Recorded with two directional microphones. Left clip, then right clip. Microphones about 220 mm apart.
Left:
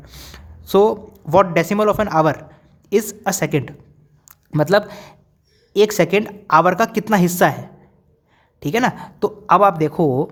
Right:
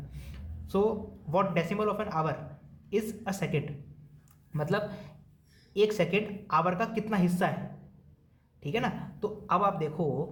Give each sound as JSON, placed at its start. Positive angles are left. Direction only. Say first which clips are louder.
{"t": 0.1, "sound": "speech", "louder": "left 13 dB", "side_deg": 50}
{"t": 8.6, "sound": "a woman's voice", "louder": "left 13 dB", "side_deg": 55}